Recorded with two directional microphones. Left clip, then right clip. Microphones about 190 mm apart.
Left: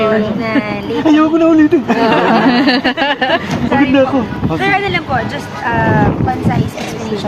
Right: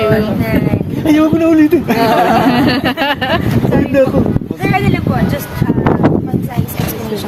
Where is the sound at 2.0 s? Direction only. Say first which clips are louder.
Right 1 dB; 90° right.